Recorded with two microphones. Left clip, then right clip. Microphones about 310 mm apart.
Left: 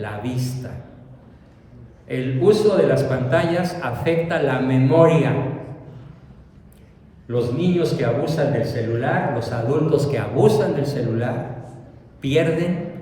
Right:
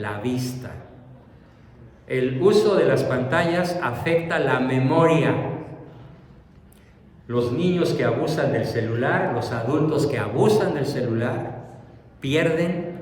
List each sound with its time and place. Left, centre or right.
0.0 s a man's voice: centre
2.0 s a man's voice: centre
7.3 s a man's voice: centre